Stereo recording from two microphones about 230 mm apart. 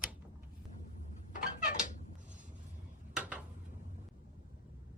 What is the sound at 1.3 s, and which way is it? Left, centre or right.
Cat, left.